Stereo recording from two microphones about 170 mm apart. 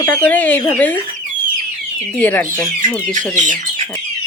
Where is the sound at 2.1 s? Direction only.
10° left (ahead or behind).